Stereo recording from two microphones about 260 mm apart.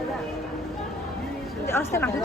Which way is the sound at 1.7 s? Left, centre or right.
Centre.